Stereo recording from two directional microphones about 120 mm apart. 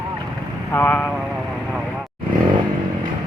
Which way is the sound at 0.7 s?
15° left (ahead or behind).